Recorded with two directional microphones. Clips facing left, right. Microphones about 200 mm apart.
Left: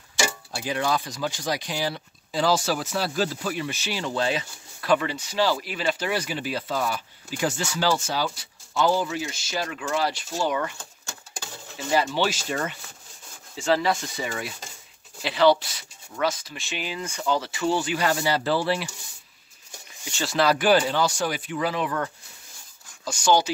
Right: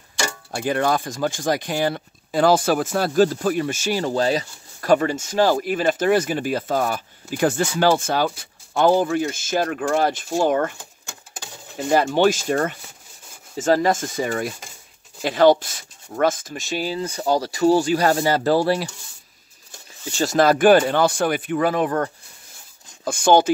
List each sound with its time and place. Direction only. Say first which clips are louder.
0.6 s speech: right 5 dB; 50° right (ahead or behind)
10.8 s a sound: right 1 dB; 15° right (ahead or behind)
11.7 s speech: right 6 dB; 55° right (ahead or behind)
20.1 s speech: right 6 dB; 40° right (ahead or behind)